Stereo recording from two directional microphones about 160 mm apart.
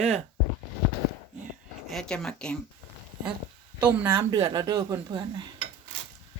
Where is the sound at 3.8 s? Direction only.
15° right (ahead or behind).